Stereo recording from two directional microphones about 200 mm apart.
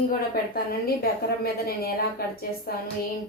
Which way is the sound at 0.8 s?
50° left (ahead or behind).